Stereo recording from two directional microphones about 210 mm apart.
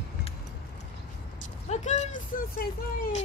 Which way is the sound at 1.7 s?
35° left (ahead or behind).